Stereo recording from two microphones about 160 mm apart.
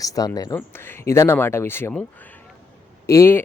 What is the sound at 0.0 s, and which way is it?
Speech, 20° left (ahead or behind).